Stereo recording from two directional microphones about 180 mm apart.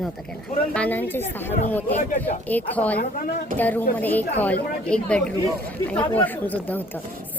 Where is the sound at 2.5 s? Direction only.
10° left (ahead or behind).